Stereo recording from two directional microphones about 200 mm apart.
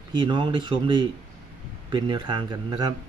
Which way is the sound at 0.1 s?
25° right (ahead or behind).